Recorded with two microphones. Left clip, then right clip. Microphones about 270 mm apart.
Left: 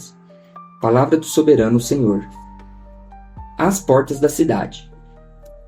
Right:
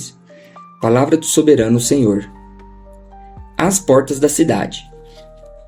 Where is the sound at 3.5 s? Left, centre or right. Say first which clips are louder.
Right 2 dB; right.